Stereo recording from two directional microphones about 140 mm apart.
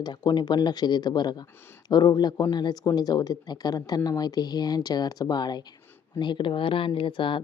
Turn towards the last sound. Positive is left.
turn(degrees=35)  # may be behind; listen again after turning